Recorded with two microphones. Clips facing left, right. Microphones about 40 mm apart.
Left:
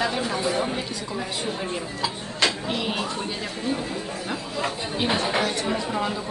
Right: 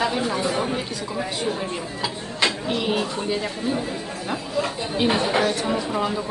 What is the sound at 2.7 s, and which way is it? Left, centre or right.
Speech, centre.